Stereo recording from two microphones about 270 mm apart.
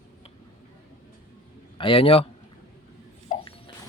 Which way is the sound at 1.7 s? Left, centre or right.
Centre.